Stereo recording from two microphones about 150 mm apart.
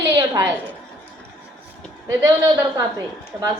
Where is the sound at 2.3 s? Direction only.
25° right (ahead or behind).